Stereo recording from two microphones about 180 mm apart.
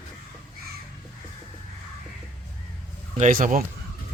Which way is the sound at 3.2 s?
45° right (ahead or behind).